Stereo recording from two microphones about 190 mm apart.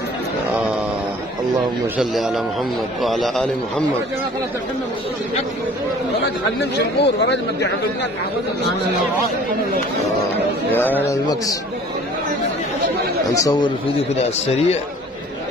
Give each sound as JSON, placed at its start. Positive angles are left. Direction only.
{"t": 2.0, "sound": "a man's voice", "side_deg": 0}
{"t": 6.6, "sound": "speech", "side_deg": 65}
{"t": 10.7, "sound": "speech", "side_deg": 10}
{"t": 13.3, "sound": "a man's voice", "side_deg": 20}